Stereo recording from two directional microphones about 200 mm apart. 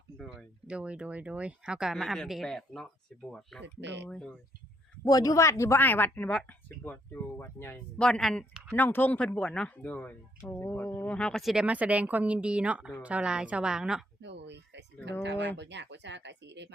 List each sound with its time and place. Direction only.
0.2 s speech: 5° right (ahead or behind)
3.8 s speech: 60° right (ahead or behind)
4.1 s speech: 5° left (ahead or behind)
5.0 s speech: 20° left (ahead or behind); by 14.0 s 5° right (ahead or behind)
14.2 s speech: 60° right (ahead or behind)